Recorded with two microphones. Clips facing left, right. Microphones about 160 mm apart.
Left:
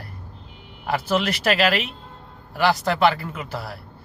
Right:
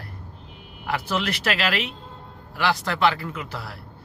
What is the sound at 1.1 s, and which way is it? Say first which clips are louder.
Speech: left 5 dB; 40° left (ahead or behind).